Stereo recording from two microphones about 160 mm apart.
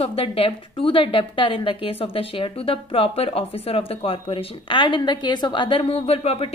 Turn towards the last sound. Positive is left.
turn(degrees=40)  # may be behind; listen again after turning